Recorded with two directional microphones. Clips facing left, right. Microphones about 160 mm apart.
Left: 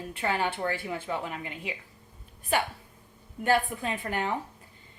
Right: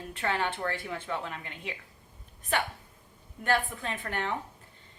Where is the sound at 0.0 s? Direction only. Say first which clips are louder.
Left 2 dB; 5° left (ahead or behind).